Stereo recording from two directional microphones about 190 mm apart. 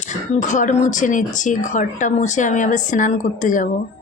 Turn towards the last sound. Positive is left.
turn(degrees=40)  # may be behind; listen again after turning